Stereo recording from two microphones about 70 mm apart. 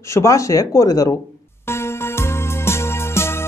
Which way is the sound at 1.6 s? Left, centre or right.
Left.